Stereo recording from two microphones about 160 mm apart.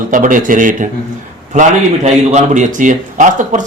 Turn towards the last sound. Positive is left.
turn(degrees=-50)  # may be behind; listen again after turning